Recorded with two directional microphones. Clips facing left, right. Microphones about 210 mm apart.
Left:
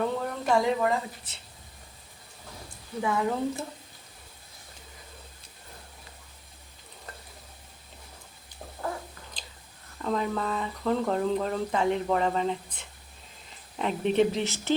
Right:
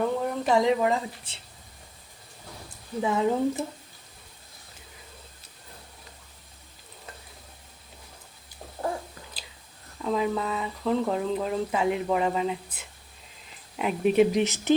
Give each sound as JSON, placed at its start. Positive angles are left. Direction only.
{"t": 0.2, "sound": "a woman's voice", "side_deg": -20}
{"t": 3.0, "sound": "speech", "side_deg": -20}
{"t": 10.0, "sound": "speech", "side_deg": -5}